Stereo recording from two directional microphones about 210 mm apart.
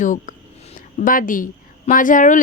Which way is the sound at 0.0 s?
35° left (ahead or behind).